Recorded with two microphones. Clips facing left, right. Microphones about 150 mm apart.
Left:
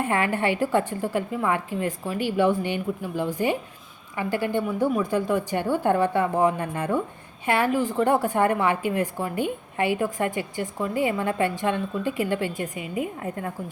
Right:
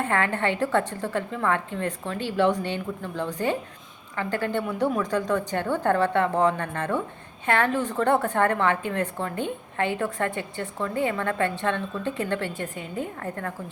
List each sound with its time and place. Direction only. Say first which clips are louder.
0.0 s a woman's voice: left 1 dB; 10° left (ahead or behind)